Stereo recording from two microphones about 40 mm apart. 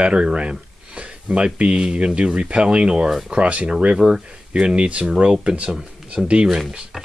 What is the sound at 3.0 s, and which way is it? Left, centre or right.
Speech, centre.